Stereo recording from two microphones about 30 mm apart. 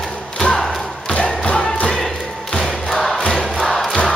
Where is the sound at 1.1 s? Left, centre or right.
Left.